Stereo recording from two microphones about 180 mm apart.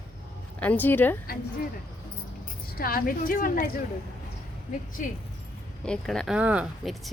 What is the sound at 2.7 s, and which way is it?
Speech, 55° left (ahead or behind).